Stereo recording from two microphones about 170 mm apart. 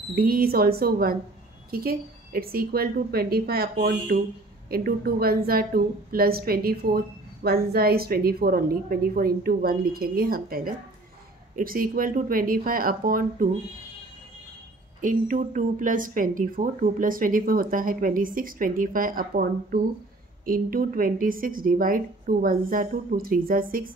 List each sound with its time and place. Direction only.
0.1 s a woman's voice: 60° right (ahead or behind)
15.0 s a woman's voice: 50° right (ahead or behind)